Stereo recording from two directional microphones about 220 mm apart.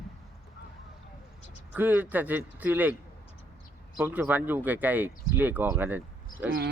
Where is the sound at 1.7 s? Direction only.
10° right (ahead or behind).